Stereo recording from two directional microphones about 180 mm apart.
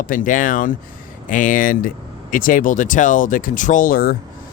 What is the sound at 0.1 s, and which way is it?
Speech, 50° left (ahead or behind).